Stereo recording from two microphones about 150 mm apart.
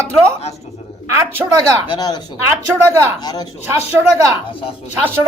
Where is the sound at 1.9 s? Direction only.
30° left (ahead or behind).